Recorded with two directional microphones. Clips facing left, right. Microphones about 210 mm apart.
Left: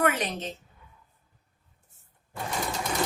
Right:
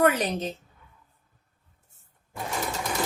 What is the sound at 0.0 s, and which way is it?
Speech, 35° right (ahead or behind).